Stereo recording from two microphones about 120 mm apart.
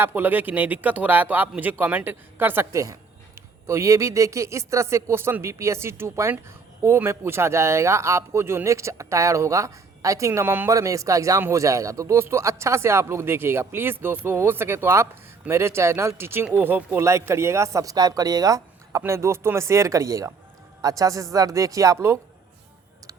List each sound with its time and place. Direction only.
0.0 s speech: 15° right (ahead or behind)